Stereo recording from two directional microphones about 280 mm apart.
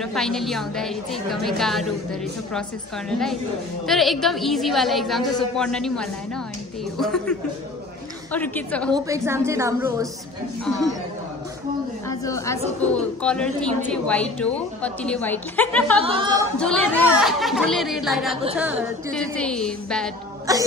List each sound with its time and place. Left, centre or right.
0.0 s a woman's voice: centre
3.1 s a woman's voice: centre
8.9 s a woman's voice: centre
12.1 s a woman's voice: centre
16.0 s speech: centre
16.3 s a woman's voice: centre